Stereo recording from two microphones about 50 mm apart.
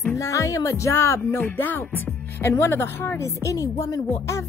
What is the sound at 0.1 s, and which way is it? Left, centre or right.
Speech, left.